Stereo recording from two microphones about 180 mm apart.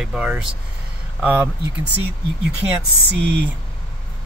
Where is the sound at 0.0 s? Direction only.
5° right (ahead or behind).